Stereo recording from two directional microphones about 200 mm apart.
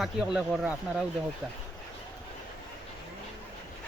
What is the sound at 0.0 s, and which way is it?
Speech, 5° right (ahead or behind).